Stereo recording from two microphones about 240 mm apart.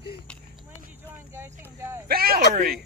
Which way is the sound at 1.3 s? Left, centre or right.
Centre.